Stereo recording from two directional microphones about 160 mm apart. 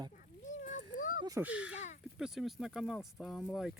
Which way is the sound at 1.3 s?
10° right (ahead or behind).